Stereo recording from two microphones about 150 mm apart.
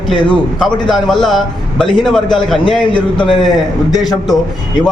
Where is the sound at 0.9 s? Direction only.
Centre (ahead or behind).